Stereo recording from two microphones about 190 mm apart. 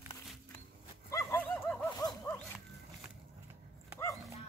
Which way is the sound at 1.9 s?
20° left (ahead or behind).